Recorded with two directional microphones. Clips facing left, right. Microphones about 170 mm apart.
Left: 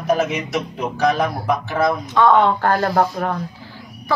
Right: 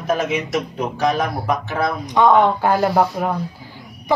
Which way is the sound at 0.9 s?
Centre (ahead or behind).